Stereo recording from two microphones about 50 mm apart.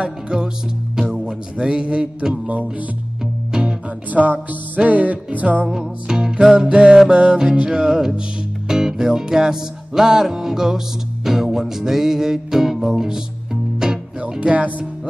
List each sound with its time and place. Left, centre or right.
0.0 s music: centre
1.1 s mantra: centre
3.5 s music: centre
4.1 s music: right
5.7 s music: centre
14.5 s speech: right